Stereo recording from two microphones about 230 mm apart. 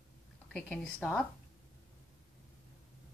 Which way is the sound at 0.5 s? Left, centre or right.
Centre.